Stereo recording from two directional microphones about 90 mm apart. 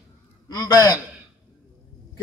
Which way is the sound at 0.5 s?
45° left (ahead or behind).